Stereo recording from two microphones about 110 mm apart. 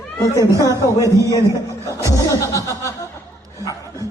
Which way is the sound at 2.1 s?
30° left (ahead or behind).